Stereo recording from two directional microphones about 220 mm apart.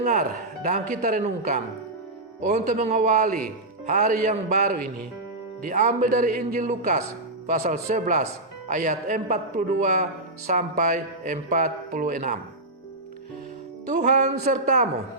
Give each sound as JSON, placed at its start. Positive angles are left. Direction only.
{"t": 0.0, "sound": "speech", "side_deg": -35}
{"t": 13.8, "sound": "speech", "side_deg": -35}